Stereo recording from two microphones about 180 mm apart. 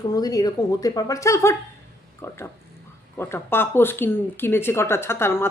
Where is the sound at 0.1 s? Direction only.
20° left (ahead or behind).